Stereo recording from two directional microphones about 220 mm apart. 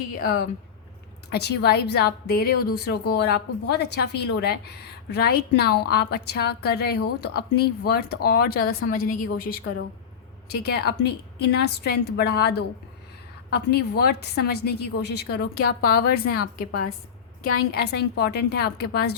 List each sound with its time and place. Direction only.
1.3 s a woman's voice: 50° left (ahead or behind)
17.7 s a woman's voice: 50° left (ahead or behind)